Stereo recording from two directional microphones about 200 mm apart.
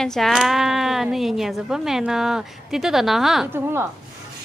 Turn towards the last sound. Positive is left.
turn(degrees=-10)  # may be behind; listen again after turning